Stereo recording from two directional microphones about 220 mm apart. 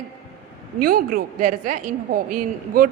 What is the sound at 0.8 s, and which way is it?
A woman's voice, 40° right (ahead or behind).